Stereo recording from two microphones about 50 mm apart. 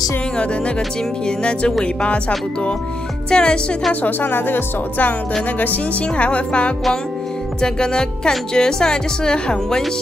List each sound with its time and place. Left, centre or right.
1.2 s speech: left
4.0 s speech: left; by 9.8 s centre